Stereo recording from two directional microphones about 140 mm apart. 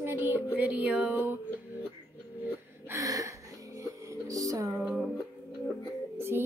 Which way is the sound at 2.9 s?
25° right (ahead or behind).